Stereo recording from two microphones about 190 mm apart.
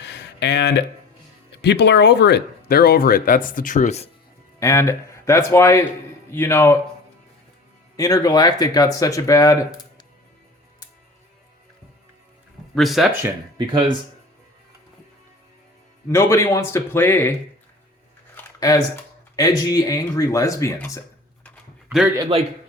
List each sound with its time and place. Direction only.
0.0 s a sound: 65° left (ahead or behind)
1.5 s speech: 65° left (ahead or behind); by 4.1 s 35° left (ahead or behind)
4.6 s speech: 15° left (ahead or behind)
7.9 s speech: 15° left (ahead or behind)
12.7 s speech: centre (ahead or behind)
13.2 s speech: 25° right (ahead or behind)
16.0 s speech: 15° left (ahead or behind)
19.4 s speech: 20° left (ahead or behind)
21.8 s a man's voice: 10° right (ahead or behind)
22.2 s a man's voice: 30° right (ahead or behind)